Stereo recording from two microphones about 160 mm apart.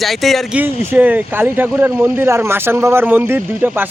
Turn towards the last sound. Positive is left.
turn(degrees=-10)  # may be behind; listen again after turning